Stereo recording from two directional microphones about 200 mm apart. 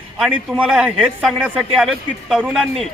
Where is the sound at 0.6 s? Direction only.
5° right (ahead or behind).